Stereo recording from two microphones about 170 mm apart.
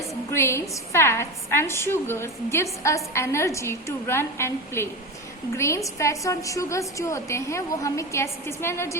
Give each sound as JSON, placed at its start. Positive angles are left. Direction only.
{"t": 0.3, "sound": "a woman's voice", "side_deg": 15}